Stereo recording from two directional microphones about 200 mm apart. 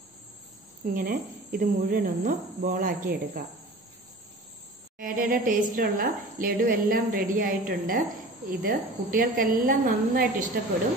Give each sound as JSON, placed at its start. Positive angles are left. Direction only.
{"t": 0.9, "sound": "a woman's voice", "side_deg": -45}
{"t": 4.9, "sound": "a woman's voice", "side_deg": -45}